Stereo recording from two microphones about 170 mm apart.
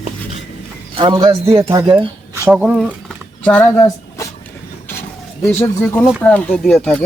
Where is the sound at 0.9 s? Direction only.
25° right (ahead or behind).